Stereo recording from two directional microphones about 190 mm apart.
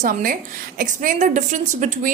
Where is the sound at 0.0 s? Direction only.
45° right (ahead or behind).